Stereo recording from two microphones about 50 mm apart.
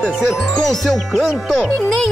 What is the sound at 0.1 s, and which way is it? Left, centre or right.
Music, centre.